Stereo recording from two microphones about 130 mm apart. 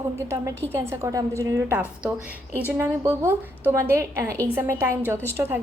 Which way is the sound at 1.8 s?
10° right (ahead or behind).